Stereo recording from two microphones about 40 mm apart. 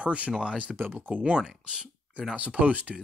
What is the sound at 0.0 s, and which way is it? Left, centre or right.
Speech, right.